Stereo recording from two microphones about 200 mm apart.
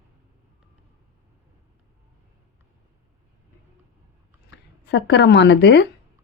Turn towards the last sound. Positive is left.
turn(degrees=60)  # may be behind; listen again after turning